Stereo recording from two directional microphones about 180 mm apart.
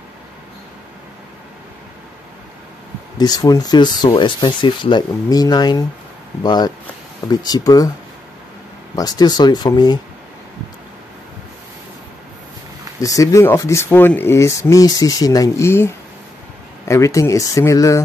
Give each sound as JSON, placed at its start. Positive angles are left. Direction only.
{"t": 3.2, "sound": "speech", "side_deg": 20}
{"t": 8.9, "sound": "speech", "side_deg": 20}
{"t": 13.0, "sound": "speech", "side_deg": 20}